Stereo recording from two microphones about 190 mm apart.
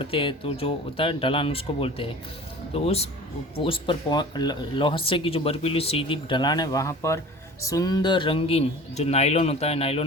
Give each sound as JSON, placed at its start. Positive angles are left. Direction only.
{"t": 0.0, "sound": "speech", "side_deg": 25}